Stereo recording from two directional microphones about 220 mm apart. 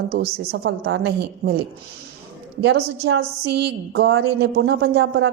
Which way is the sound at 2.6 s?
50° right (ahead or behind).